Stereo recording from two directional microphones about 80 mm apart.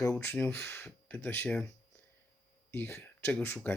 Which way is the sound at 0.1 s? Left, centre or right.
Left.